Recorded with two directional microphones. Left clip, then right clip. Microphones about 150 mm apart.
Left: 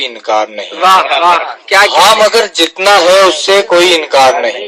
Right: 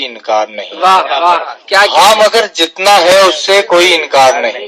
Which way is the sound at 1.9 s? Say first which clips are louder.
Even; 40° left (ahead or behind).